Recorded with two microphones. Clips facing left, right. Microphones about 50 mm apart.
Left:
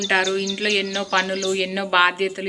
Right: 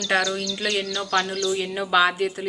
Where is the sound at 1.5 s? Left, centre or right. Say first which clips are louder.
Left 3 dB; left.